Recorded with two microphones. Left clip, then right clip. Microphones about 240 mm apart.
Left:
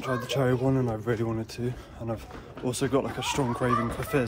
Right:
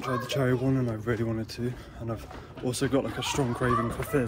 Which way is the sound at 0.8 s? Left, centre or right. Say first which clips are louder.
Left 2 dB; centre.